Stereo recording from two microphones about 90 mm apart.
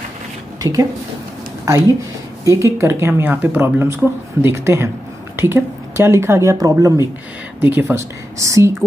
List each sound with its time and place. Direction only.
0.6 s a woman's voice: 40° right (ahead or behind)
7.6 s speech: 20° right (ahead or behind)
8.4 s speech: 35° right (ahead or behind)